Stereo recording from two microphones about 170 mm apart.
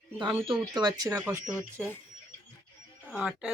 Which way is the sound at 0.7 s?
25° right (ahead or behind).